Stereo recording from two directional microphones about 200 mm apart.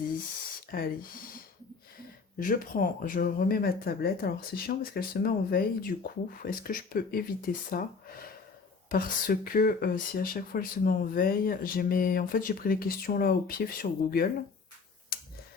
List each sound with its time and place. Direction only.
0.7 s speech: 45° left (ahead or behind)
2.4 s speech: 45° left (ahead or behind)